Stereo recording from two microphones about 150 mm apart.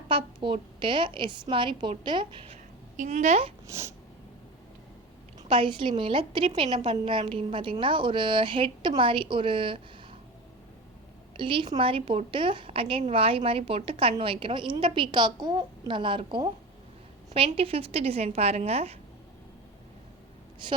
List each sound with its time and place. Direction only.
0.1 s a woman's voice: 35° right (ahead or behind)
3.0 s a woman's voice: 50° right (ahead or behind)
3.7 s a sound: 20° right (ahead or behind)
5.4 s a woman's voice: 35° right (ahead or behind)
11.3 s a woman's voice: 35° right (ahead or behind)
20.6 s a woman's voice: 35° right (ahead or behind)